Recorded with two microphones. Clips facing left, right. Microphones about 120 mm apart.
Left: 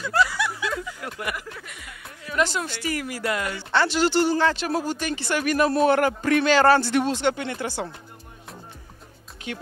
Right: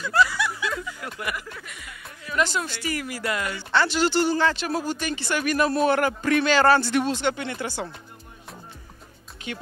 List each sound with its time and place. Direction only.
0.0 s snicker: 40° left (ahead or behind)
0.7 s a sound: 40° left (ahead or behind)
2.7 s speech: 50° left (ahead or behind)
4.3 s speech: 40° left (ahead or behind)